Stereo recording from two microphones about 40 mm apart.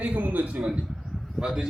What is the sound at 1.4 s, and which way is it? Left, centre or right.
Speech, centre.